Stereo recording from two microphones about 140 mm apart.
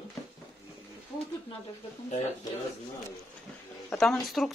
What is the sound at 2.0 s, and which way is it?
Speech, 50° left (ahead or behind).